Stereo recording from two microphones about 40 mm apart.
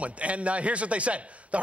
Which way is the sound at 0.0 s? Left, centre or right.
Right.